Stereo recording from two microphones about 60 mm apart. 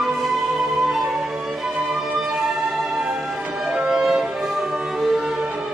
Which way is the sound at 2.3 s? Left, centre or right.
Centre.